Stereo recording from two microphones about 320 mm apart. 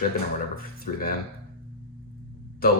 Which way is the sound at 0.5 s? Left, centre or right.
Left.